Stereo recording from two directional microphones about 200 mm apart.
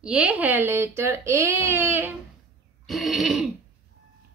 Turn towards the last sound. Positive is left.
turn(degrees=0)  # may be behind; listen again after turning